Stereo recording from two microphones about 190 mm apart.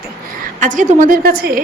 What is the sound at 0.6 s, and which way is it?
Speech, 40° right (ahead or behind).